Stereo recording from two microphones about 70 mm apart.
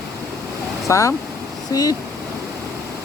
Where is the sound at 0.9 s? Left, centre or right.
Left.